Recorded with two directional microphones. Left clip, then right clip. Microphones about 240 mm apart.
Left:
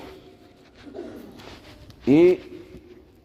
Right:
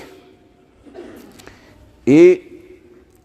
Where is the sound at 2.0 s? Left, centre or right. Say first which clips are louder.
Right 7 dB; right.